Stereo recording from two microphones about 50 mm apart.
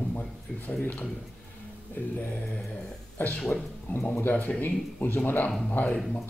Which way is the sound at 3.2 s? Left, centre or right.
Left.